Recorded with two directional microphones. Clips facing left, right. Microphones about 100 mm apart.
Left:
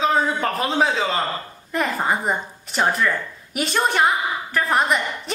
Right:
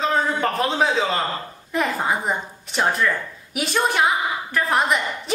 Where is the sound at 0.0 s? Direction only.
Centre (ahead or behind).